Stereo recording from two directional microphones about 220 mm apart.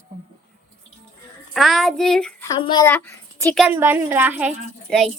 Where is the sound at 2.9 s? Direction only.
10° left (ahead or behind).